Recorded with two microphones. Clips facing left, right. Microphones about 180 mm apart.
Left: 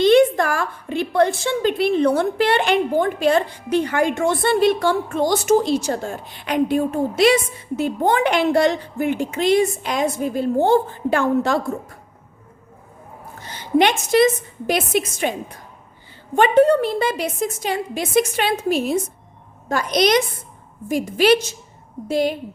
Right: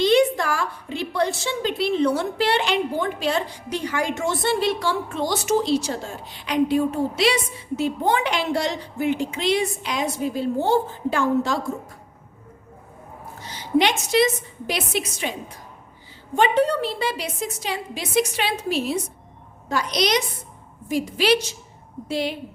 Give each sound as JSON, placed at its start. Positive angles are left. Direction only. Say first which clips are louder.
{"t": 0.0, "sound": "a woman's voice", "louder": "left 4 dB", "side_deg": 55}
{"t": 13.4, "sound": "a woman's voice", "louder": "left 3 dB", "side_deg": 55}